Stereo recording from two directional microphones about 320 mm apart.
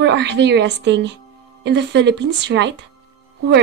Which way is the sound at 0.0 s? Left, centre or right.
Right.